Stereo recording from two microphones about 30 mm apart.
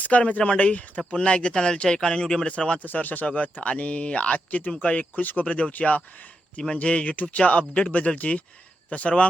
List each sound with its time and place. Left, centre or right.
0.0 s speech: left
1.1 s speech: left
1.5 s speech: left
2.8 s speech: left
3.2 s speech: left
5.2 s speech: left
5.5 s speech: left
7.0 s speech: left
8.9 s speech: left